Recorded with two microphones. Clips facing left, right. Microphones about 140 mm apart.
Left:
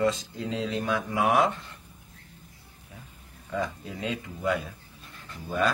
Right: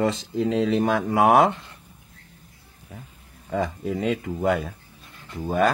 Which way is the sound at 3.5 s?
60° right (ahead or behind).